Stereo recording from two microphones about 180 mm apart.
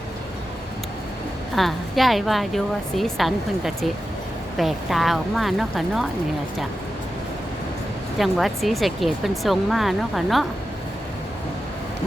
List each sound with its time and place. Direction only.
1.5 s speech: centre (ahead or behind)
8.2 s speech: centre (ahead or behind)